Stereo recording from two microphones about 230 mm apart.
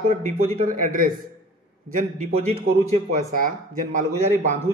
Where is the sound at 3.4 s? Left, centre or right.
Right.